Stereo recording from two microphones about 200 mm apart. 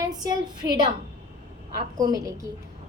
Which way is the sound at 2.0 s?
20° right (ahead or behind).